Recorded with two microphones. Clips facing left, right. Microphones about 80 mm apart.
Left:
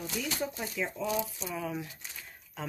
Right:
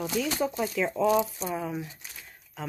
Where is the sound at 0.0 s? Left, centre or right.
Right.